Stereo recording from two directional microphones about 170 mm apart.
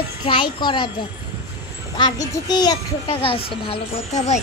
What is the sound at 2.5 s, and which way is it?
A child's voice, 25° left (ahead or behind).